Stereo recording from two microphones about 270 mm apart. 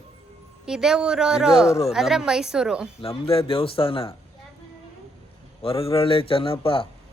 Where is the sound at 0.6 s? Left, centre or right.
Centre.